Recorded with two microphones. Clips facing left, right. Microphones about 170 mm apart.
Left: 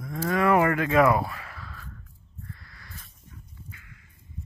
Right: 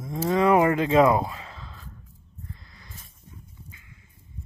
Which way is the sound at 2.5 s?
20° right (ahead or behind).